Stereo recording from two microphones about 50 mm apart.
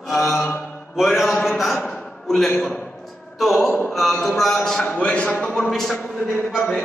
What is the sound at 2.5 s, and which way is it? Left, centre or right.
Speech, left.